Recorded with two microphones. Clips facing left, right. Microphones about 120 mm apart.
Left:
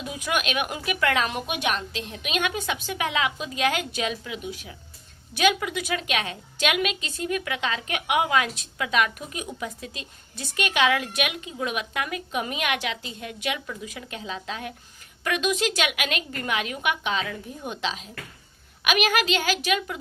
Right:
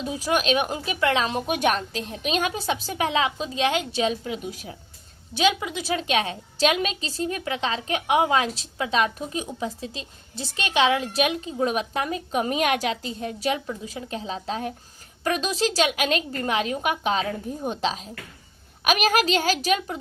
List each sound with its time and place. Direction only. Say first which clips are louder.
0.0 s a woman's voice: right 4 dB; 35° right (ahead or behind)
5.3 s a woman's voice: even; 25° right (ahead or behind)